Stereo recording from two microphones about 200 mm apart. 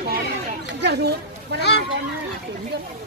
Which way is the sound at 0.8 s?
55° right (ahead or behind).